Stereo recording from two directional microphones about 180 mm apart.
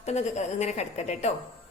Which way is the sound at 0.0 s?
40° left (ahead or behind).